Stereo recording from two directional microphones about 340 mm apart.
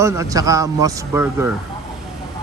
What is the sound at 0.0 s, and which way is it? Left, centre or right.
Speech, centre.